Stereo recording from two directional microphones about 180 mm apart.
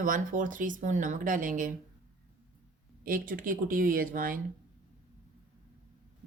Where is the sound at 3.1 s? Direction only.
50° right (ahead or behind).